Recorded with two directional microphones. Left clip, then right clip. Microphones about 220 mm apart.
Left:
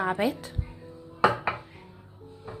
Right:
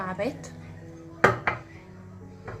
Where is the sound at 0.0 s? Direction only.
45° left (ahead or behind).